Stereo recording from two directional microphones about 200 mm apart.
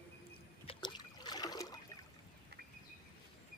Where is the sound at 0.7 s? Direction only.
20° left (ahead or behind).